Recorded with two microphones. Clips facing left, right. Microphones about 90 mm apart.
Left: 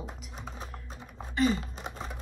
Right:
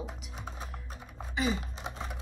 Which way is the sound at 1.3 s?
5° right (ahead or behind).